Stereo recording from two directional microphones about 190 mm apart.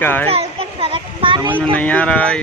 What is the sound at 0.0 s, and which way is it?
Speech, 10° left (ahead or behind).